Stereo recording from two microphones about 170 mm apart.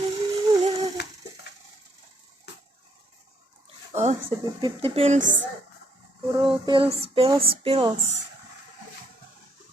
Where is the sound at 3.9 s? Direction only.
40° right (ahead or behind).